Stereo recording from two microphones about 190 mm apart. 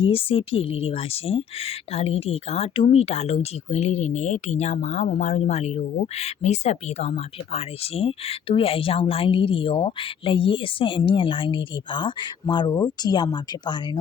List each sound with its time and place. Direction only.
0.0 s a woman's voice: 30° left (ahead or behind)